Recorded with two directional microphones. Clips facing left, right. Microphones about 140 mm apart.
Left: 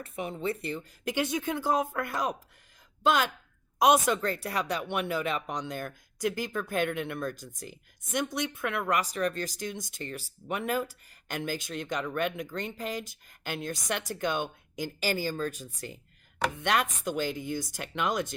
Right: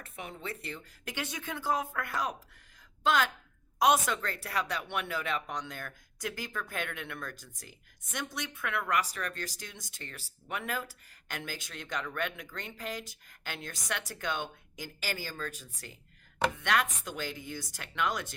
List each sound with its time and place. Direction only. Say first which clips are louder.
0.0 s speech: left 9 dB; 20° left (ahead or behind)